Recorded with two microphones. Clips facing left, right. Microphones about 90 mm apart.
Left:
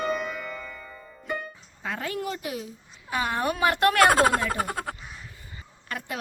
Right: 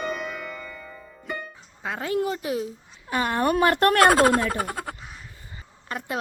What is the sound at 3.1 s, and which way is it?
Speech, 50° right (ahead or behind).